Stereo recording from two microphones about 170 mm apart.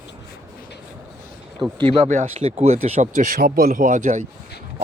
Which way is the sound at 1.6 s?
25° right (ahead or behind).